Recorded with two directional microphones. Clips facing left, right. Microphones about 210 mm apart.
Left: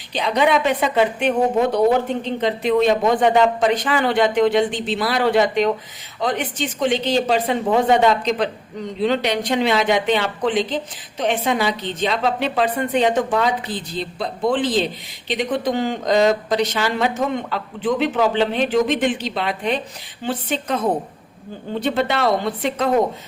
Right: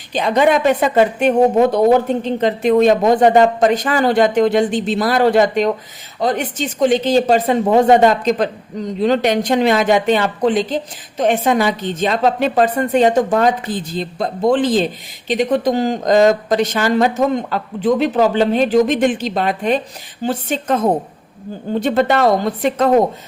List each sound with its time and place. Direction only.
0.1 s a woman's voice: 45° right (ahead or behind)